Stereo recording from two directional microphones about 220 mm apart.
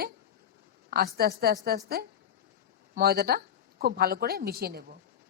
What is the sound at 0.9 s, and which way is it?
A woman's voice, 45° right (ahead or behind).